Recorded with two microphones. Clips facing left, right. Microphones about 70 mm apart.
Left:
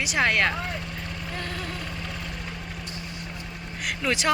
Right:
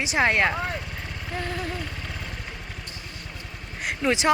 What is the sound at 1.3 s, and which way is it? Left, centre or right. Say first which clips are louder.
Vehicle: right 5 dB; centre.